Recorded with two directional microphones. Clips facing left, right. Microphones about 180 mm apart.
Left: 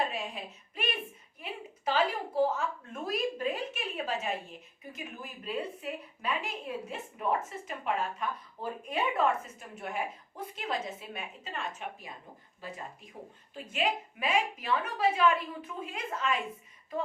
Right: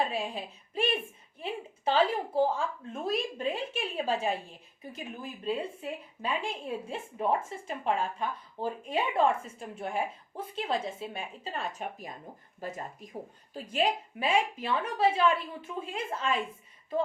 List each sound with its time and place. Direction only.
0.1 s a child's voice: 30° right (ahead or behind)